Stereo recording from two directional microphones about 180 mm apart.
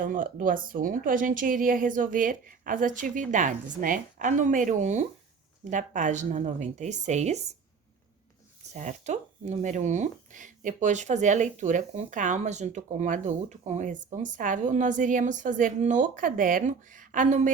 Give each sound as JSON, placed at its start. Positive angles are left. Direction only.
{"t": 0.0, "sound": "speech", "side_deg": -50}
{"t": 8.7, "sound": "speech", "side_deg": -40}